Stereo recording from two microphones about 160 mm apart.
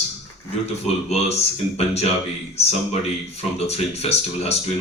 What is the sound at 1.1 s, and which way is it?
Speech, 40° left (ahead or behind).